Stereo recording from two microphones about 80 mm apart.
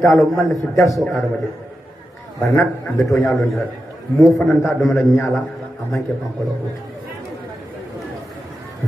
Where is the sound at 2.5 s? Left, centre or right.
Left.